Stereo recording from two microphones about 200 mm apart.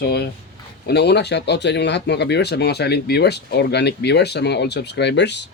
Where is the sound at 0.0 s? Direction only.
55° left (ahead or behind).